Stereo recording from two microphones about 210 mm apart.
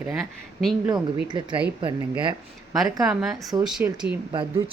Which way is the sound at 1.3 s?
20° right (ahead or behind).